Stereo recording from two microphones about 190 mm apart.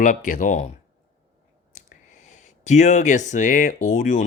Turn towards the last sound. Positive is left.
turn(degrees=40)  # may be behind; listen again after turning